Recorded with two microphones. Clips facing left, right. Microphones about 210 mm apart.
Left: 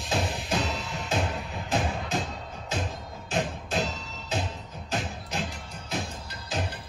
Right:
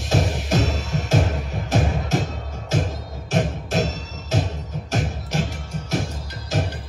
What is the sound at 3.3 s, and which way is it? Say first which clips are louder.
Music: right 6 dB; 45° right (ahead or behind).